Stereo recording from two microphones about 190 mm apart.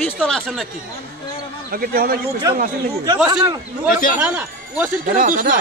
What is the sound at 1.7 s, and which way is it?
Speech, 50° right (ahead or behind).